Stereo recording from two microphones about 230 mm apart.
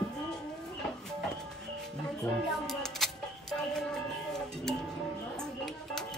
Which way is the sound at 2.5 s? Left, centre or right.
Centre.